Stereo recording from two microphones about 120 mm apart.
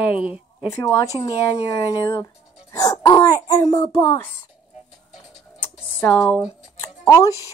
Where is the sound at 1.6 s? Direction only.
25° left (ahead or behind).